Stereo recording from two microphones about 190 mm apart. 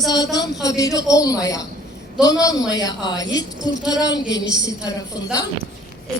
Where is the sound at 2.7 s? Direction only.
20° left (ahead or behind).